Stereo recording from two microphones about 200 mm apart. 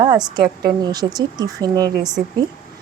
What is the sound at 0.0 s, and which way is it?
Speech, 20° right (ahead or behind).